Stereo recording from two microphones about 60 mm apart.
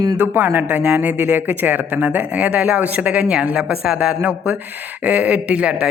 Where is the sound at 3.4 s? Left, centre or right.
Right.